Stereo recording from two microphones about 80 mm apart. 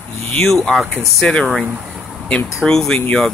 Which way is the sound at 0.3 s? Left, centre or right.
Centre.